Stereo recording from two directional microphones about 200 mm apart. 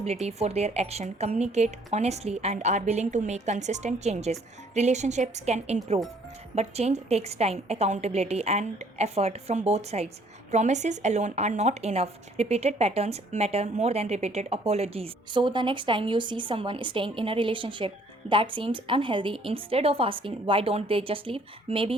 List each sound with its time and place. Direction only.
0.0 s speech: 30° right (ahead or behind)